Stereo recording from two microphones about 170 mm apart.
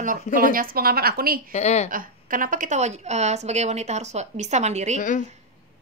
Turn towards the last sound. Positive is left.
turn(degrees=50)  # may be behind; listen again after turning